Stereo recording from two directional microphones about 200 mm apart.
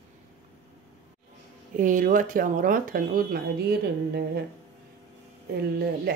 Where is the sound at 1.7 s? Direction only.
40° right (ahead or behind).